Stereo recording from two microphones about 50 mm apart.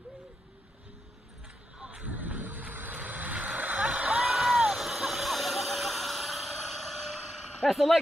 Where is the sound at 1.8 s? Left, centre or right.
Right.